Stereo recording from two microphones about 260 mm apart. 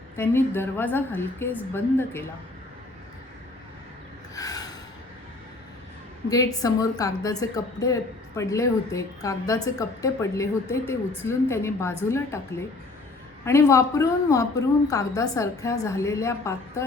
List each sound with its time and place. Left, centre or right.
0.2 s a woman's voice: centre
4.4 s snort: centre
6.2 s a woman's voice: centre